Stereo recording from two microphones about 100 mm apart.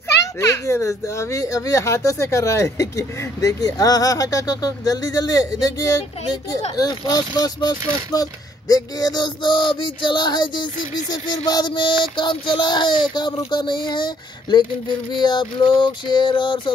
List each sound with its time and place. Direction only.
0.4 s speech: 30° left (ahead or behind); by 16.7 s 50° left (ahead or behind)